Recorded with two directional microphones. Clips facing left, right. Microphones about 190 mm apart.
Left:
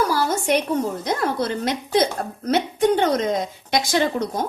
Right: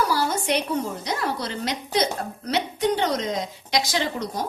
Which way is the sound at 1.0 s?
50° left (ahead or behind).